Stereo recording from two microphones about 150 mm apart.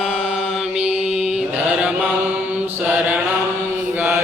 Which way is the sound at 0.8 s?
45° right (ahead or behind).